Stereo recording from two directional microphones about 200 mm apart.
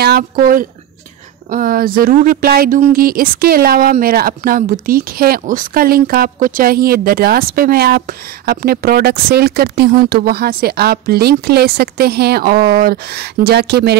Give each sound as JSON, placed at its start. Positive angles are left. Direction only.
{"t": 0.0, "sound": "speech", "side_deg": -50}